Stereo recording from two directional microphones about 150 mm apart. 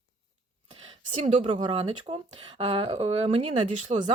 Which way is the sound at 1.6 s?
35° right (ahead or behind).